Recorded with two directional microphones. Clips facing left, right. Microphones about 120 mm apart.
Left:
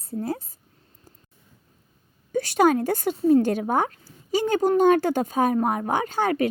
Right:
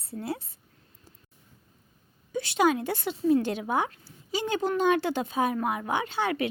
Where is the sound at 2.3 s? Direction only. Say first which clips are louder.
Left 5 dB; 45° left (ahead or behind).